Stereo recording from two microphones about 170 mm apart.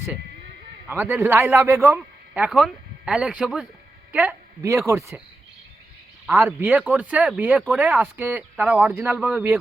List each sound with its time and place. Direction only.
0.9 s a man's voice: 10° right (ahead or behind)
6.3 s a man's voice: 10° right (ahead or behind)